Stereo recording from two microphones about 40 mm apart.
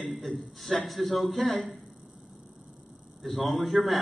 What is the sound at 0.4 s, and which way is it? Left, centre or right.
A man's voice, centre.